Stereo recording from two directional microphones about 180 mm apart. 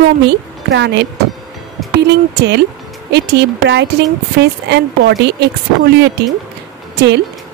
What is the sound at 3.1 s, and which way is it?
Speech, 65° right (ahead or behind).